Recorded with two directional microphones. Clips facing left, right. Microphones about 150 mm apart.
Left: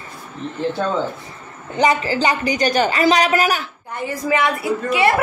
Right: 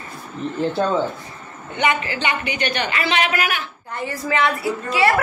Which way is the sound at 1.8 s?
35° left (ahead or behind).